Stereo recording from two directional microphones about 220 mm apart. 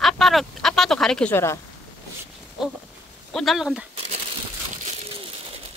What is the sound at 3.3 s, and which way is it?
Speech, centre (ahead or behind).